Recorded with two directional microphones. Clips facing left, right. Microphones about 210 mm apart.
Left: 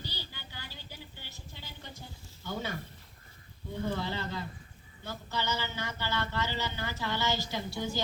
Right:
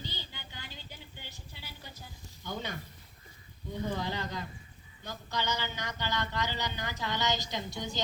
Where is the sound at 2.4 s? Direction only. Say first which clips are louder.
Left 2 dB; 15° right (ahead or behind).